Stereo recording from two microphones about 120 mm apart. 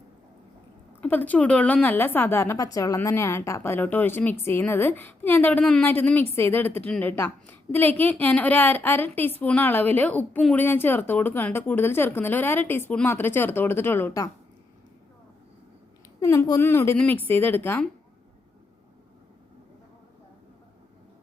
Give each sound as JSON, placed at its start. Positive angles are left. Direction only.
{"t": 1.0, "sound": "a woman's voice", "side_deg": 15}
{"t": 16.2, "sound": "a woman's voice", "side_deg": 25}